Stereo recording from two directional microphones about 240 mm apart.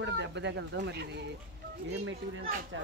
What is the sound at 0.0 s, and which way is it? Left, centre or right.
Speech, right.